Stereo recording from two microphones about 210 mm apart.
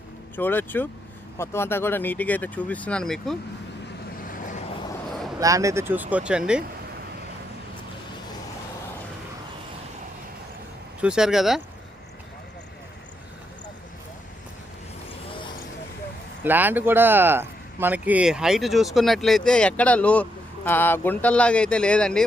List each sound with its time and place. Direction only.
0.3 s speech: 10° left (ahead or behind)
4.3 s vehicle: 40° left (ahead or behind)
5.4 s speech: 15° right (ahead or behind)
11.0 s speech: 5° right (ahead or behind)
15.3 s vehicle: 25° left (ahead or behind)
16.4 s speech: 10° right (ahead or behind)